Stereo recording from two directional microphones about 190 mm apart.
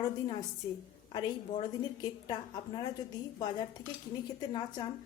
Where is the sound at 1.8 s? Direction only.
20° left (ahead or behind).